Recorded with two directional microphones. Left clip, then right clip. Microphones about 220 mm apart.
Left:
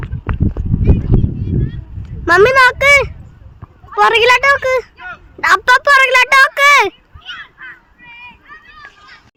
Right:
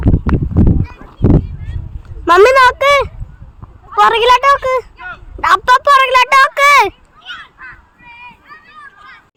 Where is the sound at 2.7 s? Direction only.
5° right (ahead or behind).